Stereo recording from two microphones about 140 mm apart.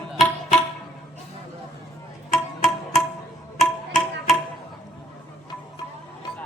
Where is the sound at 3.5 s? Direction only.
Centre (ahead or behind).